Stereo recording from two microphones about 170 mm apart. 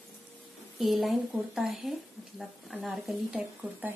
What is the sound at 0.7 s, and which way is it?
Speech, centre (ahead or behind).